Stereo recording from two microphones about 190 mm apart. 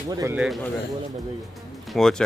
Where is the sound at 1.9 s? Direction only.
Centre (ahead or behind).